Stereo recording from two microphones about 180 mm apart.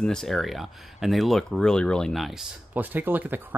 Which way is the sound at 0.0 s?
5° left (ahead or behind).